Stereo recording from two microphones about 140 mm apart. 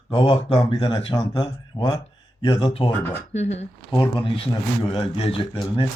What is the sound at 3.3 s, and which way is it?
Speech, 55° left (ahead or behind).